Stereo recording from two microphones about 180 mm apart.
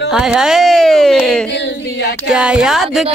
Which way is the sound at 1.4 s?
75° left (ahead or behind).